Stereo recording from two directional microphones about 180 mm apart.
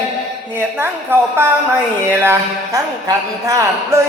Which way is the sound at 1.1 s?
10° right (ahead or behind).